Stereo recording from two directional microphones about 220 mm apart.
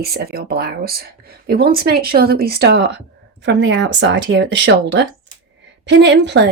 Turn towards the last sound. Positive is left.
turn(degrees=-50)  # may be behind; listen again after turning